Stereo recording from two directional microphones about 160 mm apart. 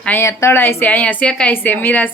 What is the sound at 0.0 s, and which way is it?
A woman's voice, 10° left (ahead or behind).